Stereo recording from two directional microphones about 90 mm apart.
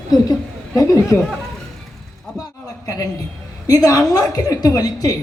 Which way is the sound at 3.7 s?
45° left (ahead or behind).